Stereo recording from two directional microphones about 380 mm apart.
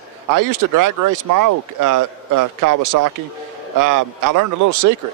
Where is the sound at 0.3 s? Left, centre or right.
Right.